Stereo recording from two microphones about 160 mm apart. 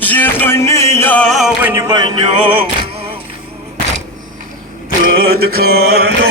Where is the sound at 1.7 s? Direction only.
25° right (ahead or behind).